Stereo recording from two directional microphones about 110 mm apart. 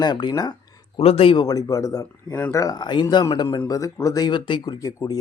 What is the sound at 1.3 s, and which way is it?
A man's voice, 35° left (ahead or behind).